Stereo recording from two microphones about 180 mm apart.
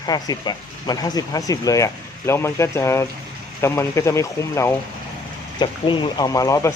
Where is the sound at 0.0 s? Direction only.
20° left (ahead or behind).